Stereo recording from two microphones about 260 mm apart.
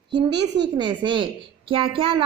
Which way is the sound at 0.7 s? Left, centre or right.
Centre.